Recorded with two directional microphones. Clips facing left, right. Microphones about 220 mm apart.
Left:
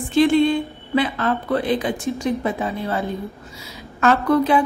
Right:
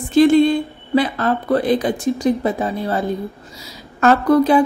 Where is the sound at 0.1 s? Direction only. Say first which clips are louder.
Right 4 dB; 40° right (ahead or behind).